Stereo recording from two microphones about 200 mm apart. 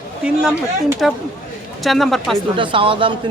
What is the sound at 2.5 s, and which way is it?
Speech, 25° right (ahead or behind).